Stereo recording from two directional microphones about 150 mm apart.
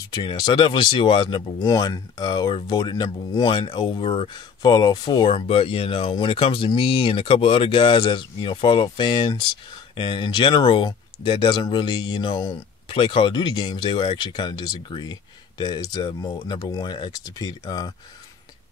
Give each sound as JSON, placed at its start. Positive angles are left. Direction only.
{"t": 0.1, "sound": "speech", "side_deg": 30}